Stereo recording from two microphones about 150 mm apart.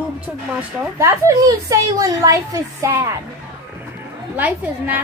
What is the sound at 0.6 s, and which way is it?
A woman's voice, 20° right (ahead or behind).